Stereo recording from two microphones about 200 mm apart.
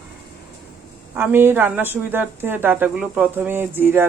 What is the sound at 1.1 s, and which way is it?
A woman's voice, 10° right (ahead or behind).